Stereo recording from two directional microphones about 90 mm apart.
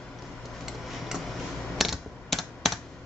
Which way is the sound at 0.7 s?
5° right (ahead or behind).